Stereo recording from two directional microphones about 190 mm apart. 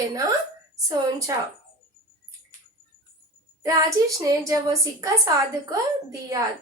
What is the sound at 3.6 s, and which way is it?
Speech, 20° right (ahead or behind).